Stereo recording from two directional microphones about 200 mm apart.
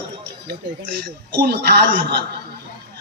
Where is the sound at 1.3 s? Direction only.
55° right (ahead or behind).